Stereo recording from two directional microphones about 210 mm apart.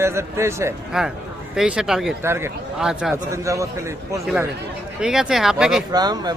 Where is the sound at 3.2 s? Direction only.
15° right (ahead or behind).